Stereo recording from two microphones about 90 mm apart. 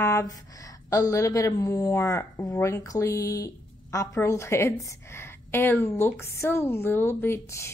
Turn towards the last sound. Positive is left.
turn(degrees=30)  # may be behind; listen again after turning